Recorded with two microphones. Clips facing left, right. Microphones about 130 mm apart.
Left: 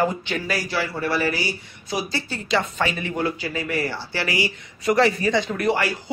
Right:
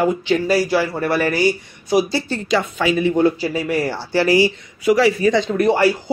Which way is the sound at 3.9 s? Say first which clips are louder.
Right 10 dB; 40° right (ahead or behind).